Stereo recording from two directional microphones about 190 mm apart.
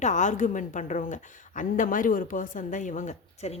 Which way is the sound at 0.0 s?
40° left (ahead or behind).